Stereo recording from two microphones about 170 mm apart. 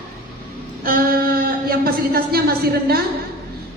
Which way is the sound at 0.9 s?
60° right (ahead or behind).